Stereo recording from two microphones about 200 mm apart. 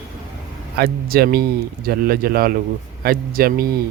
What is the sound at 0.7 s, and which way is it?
Speech, 50° right (ahead or behind).